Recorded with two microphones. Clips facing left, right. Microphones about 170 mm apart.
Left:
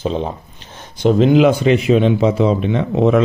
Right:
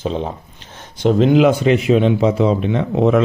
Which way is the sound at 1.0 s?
Centre (ahead or behind).